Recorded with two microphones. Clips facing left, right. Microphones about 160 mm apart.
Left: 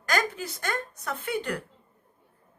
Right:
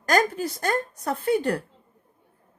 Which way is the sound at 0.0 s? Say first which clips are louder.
Right 6 dB; 35° right (ahead or behind).